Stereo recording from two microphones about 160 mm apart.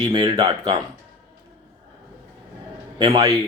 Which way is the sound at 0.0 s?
25° right (ahead or behind).